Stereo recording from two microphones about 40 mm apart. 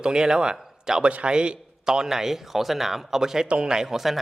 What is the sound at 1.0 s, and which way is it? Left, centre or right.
A man's voice, right.